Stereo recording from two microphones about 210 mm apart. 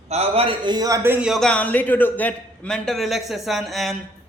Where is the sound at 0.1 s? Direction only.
30° right (ahead or behind); by 3.9 s centre (ahead or behind).